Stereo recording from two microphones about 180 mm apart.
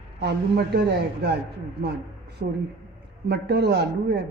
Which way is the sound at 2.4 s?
55° right (ahead or behind).